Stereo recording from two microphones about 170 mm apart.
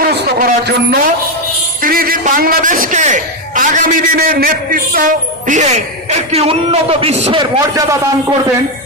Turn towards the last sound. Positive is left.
turn(degrees=-20)  # may be behind; listen again after turning